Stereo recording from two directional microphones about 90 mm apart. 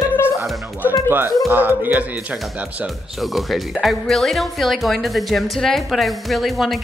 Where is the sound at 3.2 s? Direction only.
Centre (ahead or behind).